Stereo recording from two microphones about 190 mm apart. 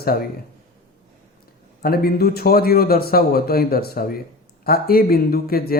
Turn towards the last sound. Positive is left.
turn(degrees=50)  # may be behind; listen again after turning